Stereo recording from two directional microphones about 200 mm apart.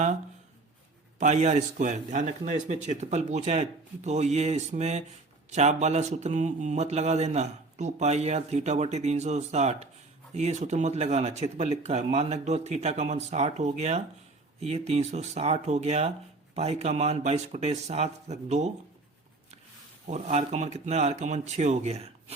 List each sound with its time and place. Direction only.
1.2 s speech: 35° right (ahead or behind)
20.1 s speech: 35° right (ahead or behind)